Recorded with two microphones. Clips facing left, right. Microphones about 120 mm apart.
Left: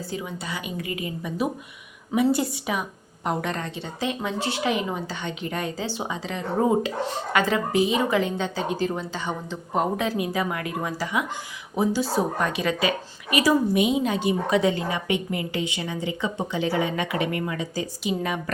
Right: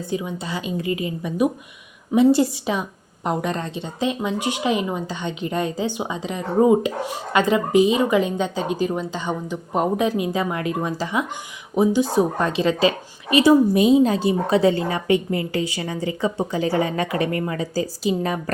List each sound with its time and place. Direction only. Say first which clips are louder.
0.0 s a woman's voice: right 5 dB; 20° right (ahead or behind); by 18.5 s 35° right (ahead or behind)